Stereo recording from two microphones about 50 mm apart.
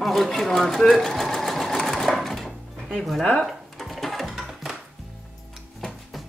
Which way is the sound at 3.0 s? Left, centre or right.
Centre.